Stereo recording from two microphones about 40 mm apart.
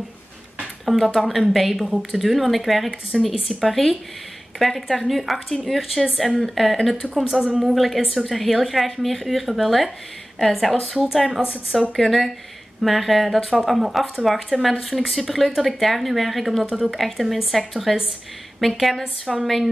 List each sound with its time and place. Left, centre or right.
0.8 s speech: centre